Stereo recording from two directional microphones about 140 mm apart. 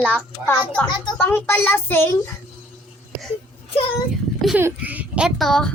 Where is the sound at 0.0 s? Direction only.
10° left (ahead or behind).